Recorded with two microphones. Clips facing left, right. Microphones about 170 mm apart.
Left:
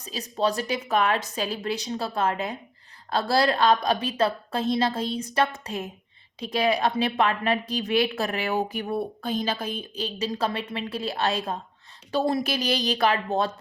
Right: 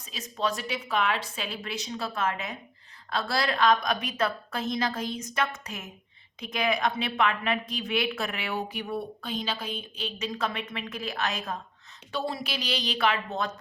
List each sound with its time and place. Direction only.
0.0 s a woman's voice: 35° left (ahead or behind)
12.1 s a woman's voice: 45° left (ahead or behind)